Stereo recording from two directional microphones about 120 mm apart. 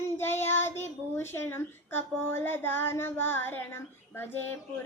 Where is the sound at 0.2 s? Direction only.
20° left (ahead or behind).